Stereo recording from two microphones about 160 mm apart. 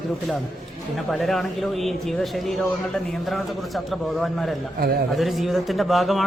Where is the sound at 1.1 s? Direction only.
Centre (ahead or behind).